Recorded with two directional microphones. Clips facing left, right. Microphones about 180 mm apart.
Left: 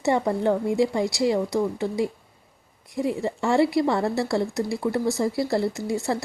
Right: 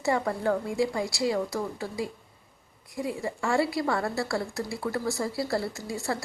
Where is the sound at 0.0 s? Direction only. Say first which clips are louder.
Left 5 dB; 20° left (ahead or behind).